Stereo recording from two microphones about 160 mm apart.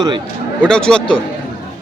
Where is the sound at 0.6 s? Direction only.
5° left (ahead or behind).